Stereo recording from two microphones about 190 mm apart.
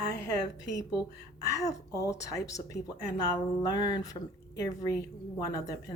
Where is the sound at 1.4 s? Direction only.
15° left (ahead or behind).